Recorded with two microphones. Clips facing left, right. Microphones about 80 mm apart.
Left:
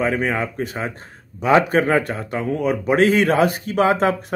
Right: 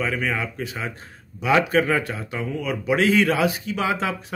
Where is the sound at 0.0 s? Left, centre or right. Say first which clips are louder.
Left 5 dB; left.